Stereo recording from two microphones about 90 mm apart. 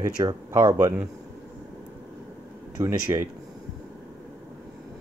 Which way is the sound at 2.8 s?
30° right (ahead or behind).